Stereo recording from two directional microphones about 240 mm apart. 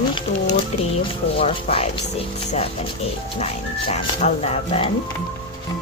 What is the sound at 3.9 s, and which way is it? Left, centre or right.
Speech, left.